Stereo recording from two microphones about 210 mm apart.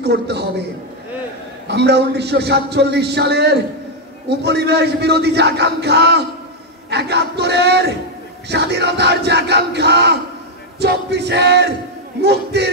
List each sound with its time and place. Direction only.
0.0 s speech: 50° right (ahead or behind)
1.7 s speech: 55° right (ahead or behind)